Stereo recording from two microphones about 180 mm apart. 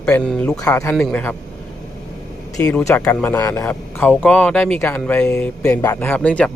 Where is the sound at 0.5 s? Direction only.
20° left (ahead or behind).